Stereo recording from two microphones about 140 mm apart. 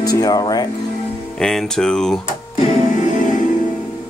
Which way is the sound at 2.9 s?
60° left (ahead or behind).